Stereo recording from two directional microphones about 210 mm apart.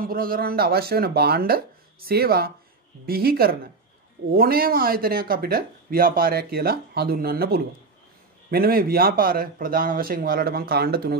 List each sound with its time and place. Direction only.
0.0 s speech: 45° right (ahead or behind)